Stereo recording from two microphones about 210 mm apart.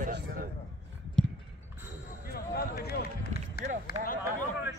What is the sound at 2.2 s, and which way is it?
Basketball bounce, 45° left (ahead or behind).